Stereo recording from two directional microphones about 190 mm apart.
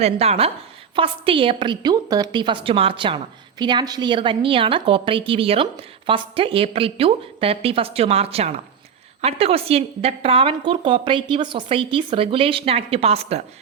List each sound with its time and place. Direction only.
0.0 s a woman's voice: 35° right (ahead or behind)